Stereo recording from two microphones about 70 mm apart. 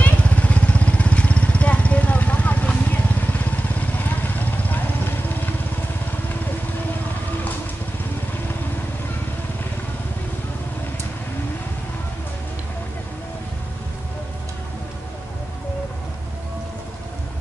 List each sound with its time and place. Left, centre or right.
0.0 s vehicle: left